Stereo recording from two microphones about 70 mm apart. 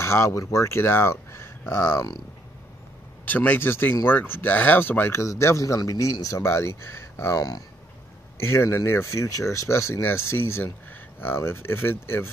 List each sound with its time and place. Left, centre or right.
0.0 s speech: left
3.3 s speech: left
5.2 s speech: left
7.3 s speech: left
8.4 s speech: left